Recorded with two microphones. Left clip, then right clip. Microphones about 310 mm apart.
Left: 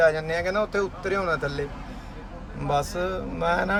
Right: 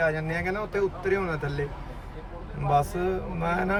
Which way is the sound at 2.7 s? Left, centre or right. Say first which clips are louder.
Right 1 dB; centre.